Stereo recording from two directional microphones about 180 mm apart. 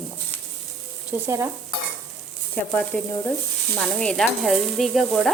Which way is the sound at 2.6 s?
10° left (ahead or behind).